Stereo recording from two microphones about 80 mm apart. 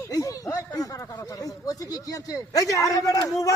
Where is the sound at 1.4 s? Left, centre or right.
Left.